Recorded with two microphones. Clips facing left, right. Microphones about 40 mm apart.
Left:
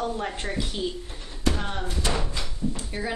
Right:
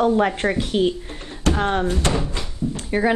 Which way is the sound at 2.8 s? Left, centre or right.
Right.